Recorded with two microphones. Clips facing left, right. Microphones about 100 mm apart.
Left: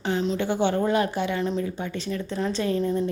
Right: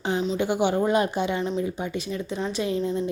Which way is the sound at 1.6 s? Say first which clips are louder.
Right 1 dB; 15° right (ahead or behind).